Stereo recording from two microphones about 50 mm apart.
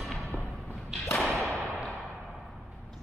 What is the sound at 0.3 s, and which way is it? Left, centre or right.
Music, left.